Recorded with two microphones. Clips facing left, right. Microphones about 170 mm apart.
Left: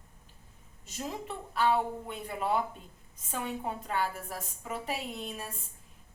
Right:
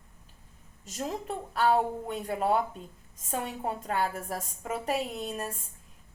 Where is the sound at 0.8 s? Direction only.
40° right (ahead or behind).